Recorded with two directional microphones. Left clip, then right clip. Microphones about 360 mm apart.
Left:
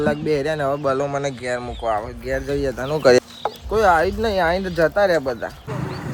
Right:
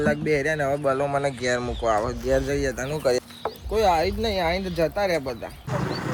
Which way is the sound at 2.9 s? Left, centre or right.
Left.